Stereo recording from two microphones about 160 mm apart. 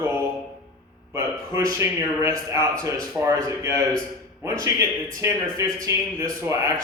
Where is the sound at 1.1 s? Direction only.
20° right (ahead or behind).